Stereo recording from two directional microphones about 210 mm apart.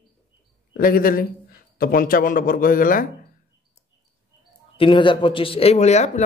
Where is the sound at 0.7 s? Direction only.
45° left (ahead or behind).